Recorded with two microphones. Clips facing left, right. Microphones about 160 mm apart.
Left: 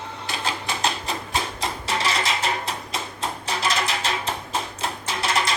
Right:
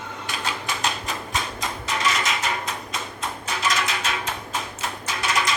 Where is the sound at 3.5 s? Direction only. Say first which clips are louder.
Even; 30° left (ahead or behind).